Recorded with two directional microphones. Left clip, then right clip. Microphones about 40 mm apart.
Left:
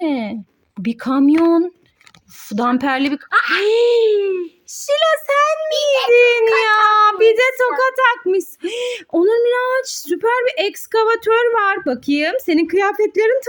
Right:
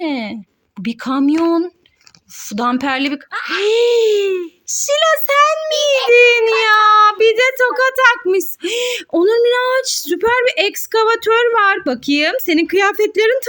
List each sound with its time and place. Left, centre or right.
0.0 s a sound: left
0.8 s speech: left
2.4 s speech: left
3.6 s a child's voice: left
6.6 s speech: centre
12.7 s a woman's voice: centre